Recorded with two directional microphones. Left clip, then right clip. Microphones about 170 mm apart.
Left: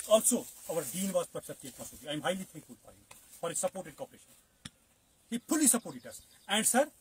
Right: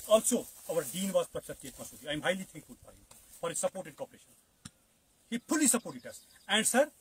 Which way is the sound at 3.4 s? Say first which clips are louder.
Right 1 dB; 20° right (ahead or behind).